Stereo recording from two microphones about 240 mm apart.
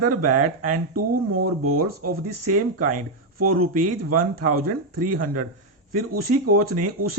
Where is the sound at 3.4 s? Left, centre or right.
Right.